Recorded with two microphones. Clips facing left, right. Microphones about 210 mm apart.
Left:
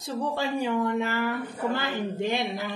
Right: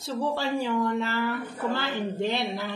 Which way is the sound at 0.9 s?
15° left (ahead or behind).